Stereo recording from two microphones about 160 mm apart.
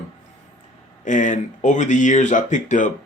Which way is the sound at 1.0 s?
50° left (ahead or behind).